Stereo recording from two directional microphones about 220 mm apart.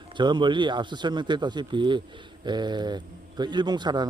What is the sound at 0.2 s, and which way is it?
A man's voice, 20° right (ahead or behind).